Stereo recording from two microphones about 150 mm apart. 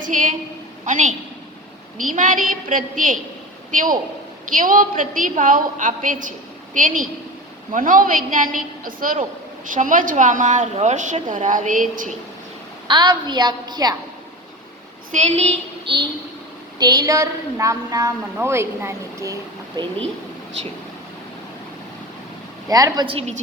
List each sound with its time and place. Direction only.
0.0 s a woman's voice: 60° right (ahead or behind)
12.9 s a woman's voice: 30° right (ahead or behind)
15.1 s a woman's voice: 45° right (ahead or behind)
16.7 s a woman's voice: 25° right (ahead or behind)
22.7 s a woman's voice: 25° right (ahead or behind)